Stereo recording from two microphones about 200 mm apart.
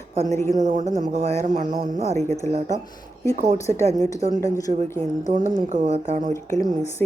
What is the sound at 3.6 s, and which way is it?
A woman's voice, 15° left (ahead or behind).